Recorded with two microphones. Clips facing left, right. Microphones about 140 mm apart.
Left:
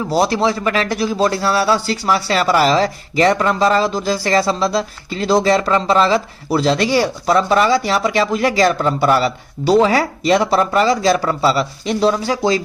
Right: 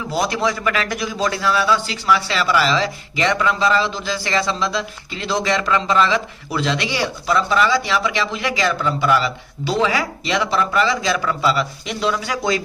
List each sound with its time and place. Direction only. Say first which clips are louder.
0.1 s a man's voice: left 4 dB; 30° left (ahead or behind)